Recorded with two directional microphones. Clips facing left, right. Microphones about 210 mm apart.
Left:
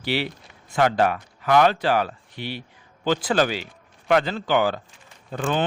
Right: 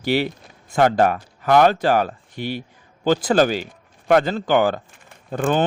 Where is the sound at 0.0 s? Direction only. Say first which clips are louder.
Right 5 dB; 45° right (ahead or behind).